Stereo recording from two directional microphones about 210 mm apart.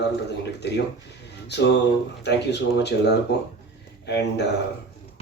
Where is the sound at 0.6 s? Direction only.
55° left (ahead or behind).